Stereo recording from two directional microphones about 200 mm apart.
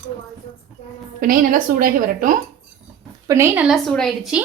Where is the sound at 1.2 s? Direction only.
45° right (ahead or behind).